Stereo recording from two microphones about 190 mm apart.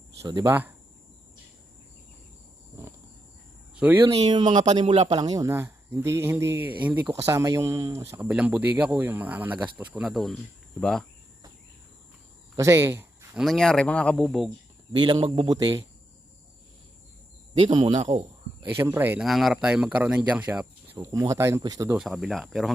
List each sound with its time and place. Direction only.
0.2 s speech: 20° right (ahead or behind)
3.8 s speech: 5° right (ahead or behind)
4.8 s speech: 25° right (ahead or behind)
5.2 s speech: 20° right (ahead or behind); by 11.0 s 5° left (ahead or behind)
12.5 s speech: 15° right (ahead or behind)
13.4 s speech: centre (ahead or behind)
14.9 s speech: 25° right (ahead or behind)
17.6 s speech: 35° right (ahead or behind)
18.8 s speech: 10° right (ahead or behind)
21.9 s speech: centre (ahead or behind)